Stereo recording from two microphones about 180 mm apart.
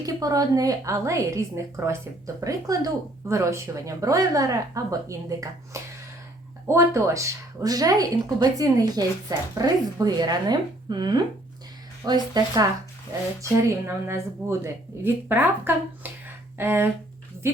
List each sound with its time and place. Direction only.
0.0 s a woman's voice: 20° right (ahead or behind)
13.7 s speech: 15° right (ahead or behind)
16.2 s a sound: 10° right (ahead or behind)